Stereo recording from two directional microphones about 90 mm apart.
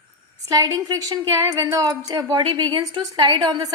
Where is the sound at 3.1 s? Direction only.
65° right (ahead or behind).